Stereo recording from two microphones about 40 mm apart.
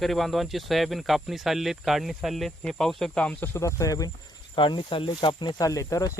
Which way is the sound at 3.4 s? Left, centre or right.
Left.